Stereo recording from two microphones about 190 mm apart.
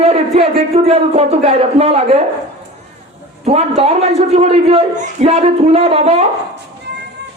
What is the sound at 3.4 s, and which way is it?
A woman's voice, 35° right (ahead or behind).